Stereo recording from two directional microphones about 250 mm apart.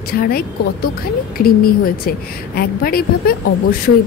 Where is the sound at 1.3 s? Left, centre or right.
Left.